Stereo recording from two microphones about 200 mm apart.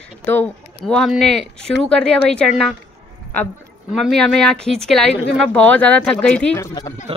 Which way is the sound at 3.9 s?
Centre (ahead or behind).